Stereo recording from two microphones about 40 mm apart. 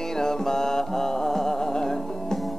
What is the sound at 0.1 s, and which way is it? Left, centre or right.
Music, centre.